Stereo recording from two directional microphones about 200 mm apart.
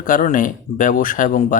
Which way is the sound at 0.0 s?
45° left (ahead or behind).